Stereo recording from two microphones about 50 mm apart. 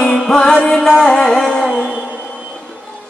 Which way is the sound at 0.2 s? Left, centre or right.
Centre.